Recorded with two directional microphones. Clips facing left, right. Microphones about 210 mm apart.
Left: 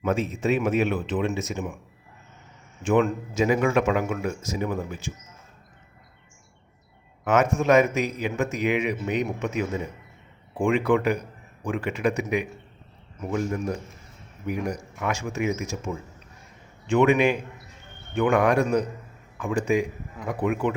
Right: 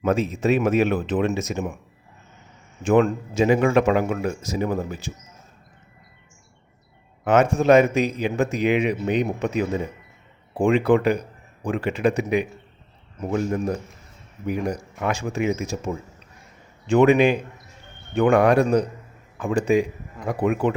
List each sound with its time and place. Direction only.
0.0 s speech: 40° right (ahead or behind)
2.8 s speech: 35° right (ahead or behind)
7.3 s speech: 30° right (ahead or behind)